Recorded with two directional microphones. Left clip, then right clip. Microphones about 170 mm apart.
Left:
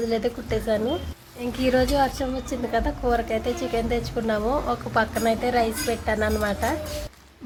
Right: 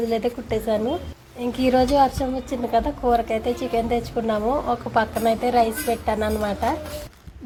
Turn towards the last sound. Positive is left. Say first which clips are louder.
# right 1 dB
turn(degrees=-10)  # may be behind; listen again after turning